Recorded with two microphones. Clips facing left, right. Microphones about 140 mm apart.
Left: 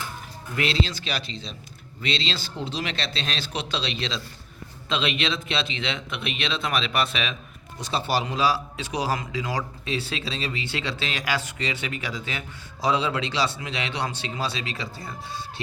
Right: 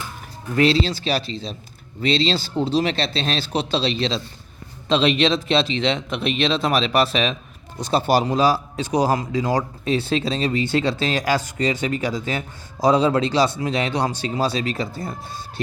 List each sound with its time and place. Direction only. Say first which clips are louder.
0.5 s a man's voice: right 8 dB; 35° right (ahead or behind)